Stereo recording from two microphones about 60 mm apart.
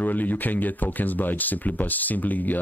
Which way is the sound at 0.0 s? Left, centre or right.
Left.